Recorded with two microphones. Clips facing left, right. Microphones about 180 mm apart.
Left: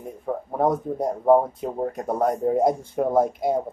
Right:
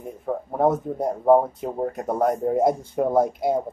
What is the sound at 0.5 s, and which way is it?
Speech, 5° right (ahead or behind).